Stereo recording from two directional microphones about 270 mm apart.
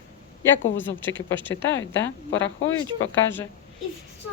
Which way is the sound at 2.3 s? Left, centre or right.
Left.